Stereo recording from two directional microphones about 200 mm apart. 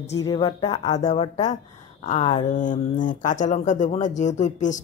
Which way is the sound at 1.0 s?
35° left (ahead or behind).